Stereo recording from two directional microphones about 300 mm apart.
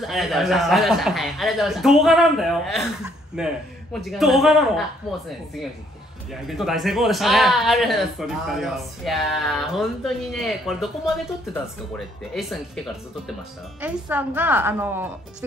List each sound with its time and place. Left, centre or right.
0.0 s speech: centre
6.4 s speech: centre
12.4 s a woman's voice: centre